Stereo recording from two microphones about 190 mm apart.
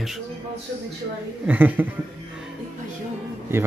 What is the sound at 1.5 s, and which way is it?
Speech, 10° right (ahead or behind).